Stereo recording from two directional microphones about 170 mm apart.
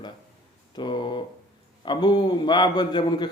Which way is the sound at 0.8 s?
25° left (ahead or behind).